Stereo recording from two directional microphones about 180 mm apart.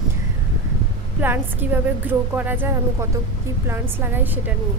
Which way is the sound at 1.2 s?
10° right (ahead or behind).